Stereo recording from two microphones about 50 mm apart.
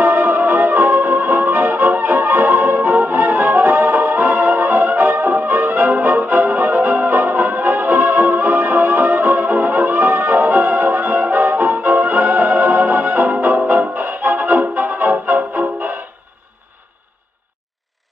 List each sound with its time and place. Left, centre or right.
0.0 s music: right